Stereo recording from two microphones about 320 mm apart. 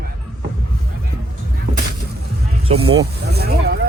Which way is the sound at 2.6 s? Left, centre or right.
Centre.